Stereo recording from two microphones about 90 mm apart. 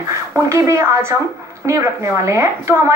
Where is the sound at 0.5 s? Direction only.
35° right (ahead or behind).